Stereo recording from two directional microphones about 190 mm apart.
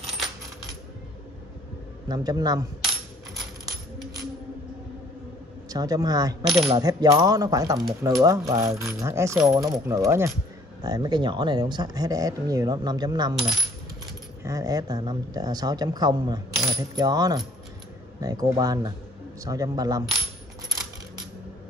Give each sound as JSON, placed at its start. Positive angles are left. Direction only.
{"t": 2.0, "sound": "speech", "side_deg": -20}
{"t": 5.7, "sound": "speech", "side_deg": -20}
{"t": 6.4, "sound": "coin", "side_deg": 0}
{"t": 6.8, "sound": "speech", "side_deg": -20}
{"t": 14.4, "sound": "speech", "side_deg": -15}